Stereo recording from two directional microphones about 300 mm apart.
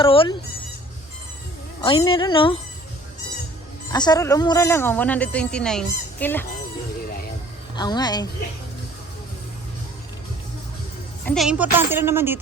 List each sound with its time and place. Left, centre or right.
0.0 s speech: centre
1.8 s speech: centre
3.9 s speech: centre
7.8 s speech: centre
11.3 s speech: centre